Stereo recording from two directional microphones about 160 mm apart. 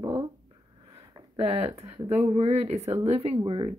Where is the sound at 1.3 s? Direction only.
40° right (ahead or behind).